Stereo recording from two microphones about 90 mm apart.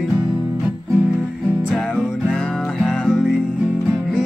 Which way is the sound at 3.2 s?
5° right (ahead or behind).